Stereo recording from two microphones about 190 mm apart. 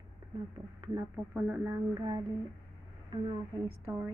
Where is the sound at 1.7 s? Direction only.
15° right (ahead or behind).